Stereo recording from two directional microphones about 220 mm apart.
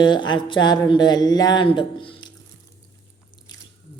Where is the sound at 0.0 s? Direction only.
20° left (ahead or behind).